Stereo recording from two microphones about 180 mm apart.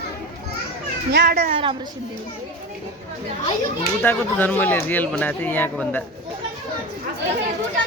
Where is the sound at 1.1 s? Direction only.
55° right (ahead or behind).